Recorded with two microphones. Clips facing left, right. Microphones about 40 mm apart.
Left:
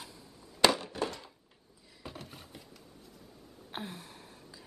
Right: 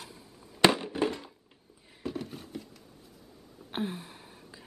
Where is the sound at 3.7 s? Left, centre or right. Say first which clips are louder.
Right 7 dB; right.